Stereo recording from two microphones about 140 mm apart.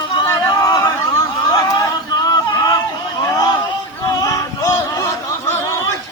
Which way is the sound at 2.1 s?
30° left (ahead or behind).